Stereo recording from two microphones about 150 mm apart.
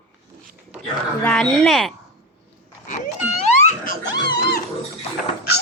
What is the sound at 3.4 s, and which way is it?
Baby laughter, 55° left (ahead or behind).